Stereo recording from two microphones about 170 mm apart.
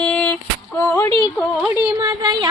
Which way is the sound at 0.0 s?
10° left (ahead or behind).